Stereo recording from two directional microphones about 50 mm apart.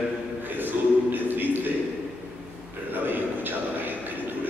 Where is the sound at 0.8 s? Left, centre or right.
Right.